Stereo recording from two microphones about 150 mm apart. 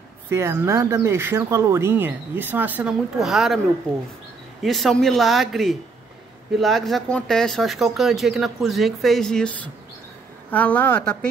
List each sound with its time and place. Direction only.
0.3 s speech: 20° right (ahead or behind); by 3.5 s centre (ahead or behind)
4.6 s speech: centre (ahead or behind)